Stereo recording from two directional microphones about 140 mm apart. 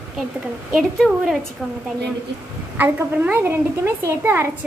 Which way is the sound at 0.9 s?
Centre (ahead or behind).